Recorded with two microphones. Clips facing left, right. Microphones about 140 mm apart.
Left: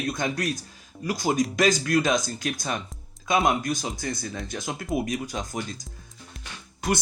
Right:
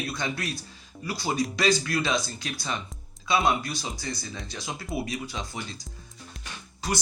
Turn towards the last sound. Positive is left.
turn(degrees=55)  # may be behind; listen again after turning